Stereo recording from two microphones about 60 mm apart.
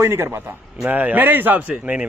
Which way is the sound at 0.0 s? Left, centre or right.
Right.